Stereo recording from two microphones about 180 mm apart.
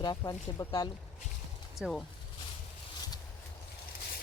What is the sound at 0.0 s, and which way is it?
Speech, 20° left (ahead or behind).